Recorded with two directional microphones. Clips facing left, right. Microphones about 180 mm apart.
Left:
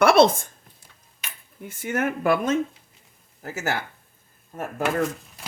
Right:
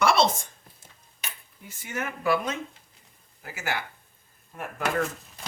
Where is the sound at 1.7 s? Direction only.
55° left (ahead or behind).